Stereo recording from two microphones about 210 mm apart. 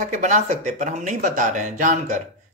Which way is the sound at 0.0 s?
35° right (ahead or behind).